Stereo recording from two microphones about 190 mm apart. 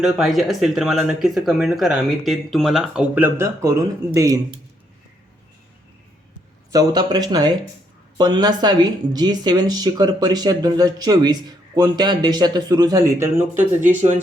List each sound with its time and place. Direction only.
0.0 s speech: centre (ahead or behind); by 4.6 s 15° right (ahead or behind)
6.7 s speech: 20° right (ahead or behind)
13.8 s speech: 40° right (ahead or behind)